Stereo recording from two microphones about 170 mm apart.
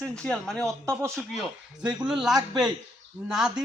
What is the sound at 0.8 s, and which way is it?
Speech, 15° right (ahead or behind).